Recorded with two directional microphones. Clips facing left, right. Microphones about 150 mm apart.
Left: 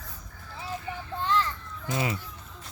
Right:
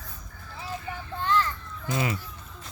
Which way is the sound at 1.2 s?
20° left (ahead or behind).